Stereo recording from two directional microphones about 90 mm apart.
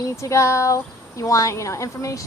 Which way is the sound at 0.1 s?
35° left (ahead or behind).